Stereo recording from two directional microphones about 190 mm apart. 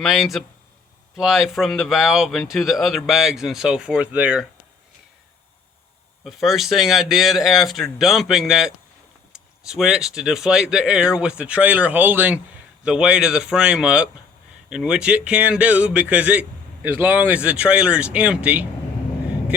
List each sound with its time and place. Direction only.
0.0 s speech: centre (ahead or behind)
6.2 s speech: centre (ahead or behind)